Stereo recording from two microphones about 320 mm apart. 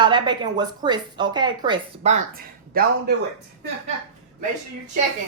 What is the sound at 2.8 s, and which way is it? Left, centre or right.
Speech, right.